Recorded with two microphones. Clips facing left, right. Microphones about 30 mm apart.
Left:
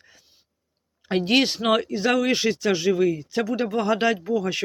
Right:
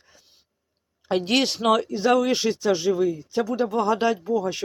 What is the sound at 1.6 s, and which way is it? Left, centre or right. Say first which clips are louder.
Speech: right 1 dB; left.